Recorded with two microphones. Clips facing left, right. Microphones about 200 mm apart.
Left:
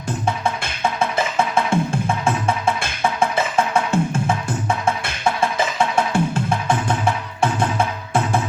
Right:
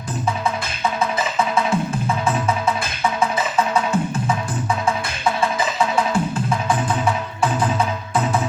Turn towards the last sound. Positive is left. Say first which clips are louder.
# even
turn(degrees=25)  # may be behind; listen again after turning